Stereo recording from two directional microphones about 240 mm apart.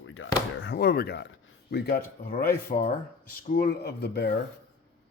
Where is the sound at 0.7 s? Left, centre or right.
Left.